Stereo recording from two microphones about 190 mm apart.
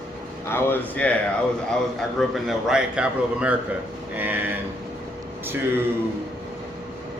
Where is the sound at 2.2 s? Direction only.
Centre (ahead or behind).